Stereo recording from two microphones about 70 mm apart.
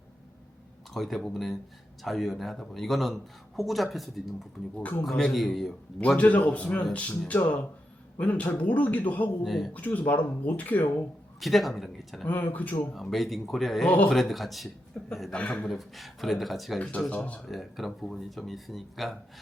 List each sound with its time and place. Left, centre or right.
0.9 s speech: centre
4.8 s a man's voice: left
5.0 s speech: centre
6.1 s a man's voice: left
8.2 s a man's voice: left
9.4 s speech: centre
9.7 s a man's voice: left
11.3 s speech: centre
12.2 s a man's voice: left
12.9 s speech: centre
15.0 s a man's voice: left; by 16.8 s centre
17.1 s a man's voice: left
17.4 s speech: centre